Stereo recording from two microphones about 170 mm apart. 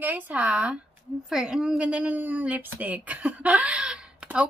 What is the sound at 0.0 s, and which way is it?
Speech, 10° right (ahead or behind).